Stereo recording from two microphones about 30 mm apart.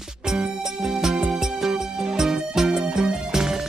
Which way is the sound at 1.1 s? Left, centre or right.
Right.